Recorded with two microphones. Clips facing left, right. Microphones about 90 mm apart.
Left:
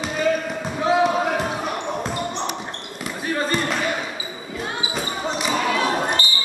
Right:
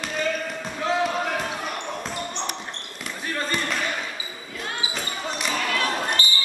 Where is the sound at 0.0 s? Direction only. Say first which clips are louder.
Left 5 dB; 5° left (ahead or behind).